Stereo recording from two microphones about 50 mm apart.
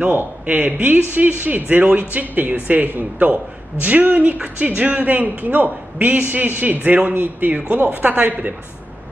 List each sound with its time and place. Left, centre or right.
0.0 s speech: right